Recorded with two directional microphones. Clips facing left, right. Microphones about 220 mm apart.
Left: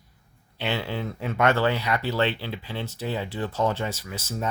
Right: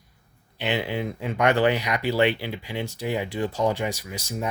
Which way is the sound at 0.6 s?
15° right (ahead or behind).